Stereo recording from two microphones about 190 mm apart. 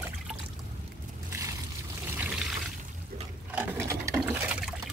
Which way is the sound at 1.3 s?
15° right (ahead or behind).